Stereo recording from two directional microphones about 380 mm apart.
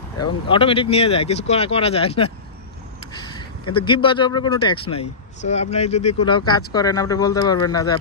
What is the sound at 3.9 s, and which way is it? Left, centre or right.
Speech, centre.